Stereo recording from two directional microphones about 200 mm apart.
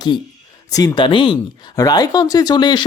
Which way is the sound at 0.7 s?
15° left (ahead or behind).